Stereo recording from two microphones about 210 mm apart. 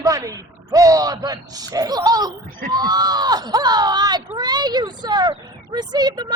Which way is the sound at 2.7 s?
20° right (ahead or behind).